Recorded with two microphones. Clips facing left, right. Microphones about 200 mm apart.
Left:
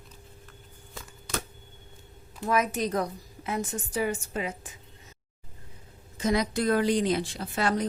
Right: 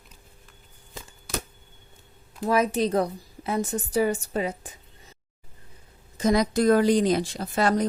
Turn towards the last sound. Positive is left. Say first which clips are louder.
# right 4 dB
turn(degrees=-40)  # may be behind; listen again after turning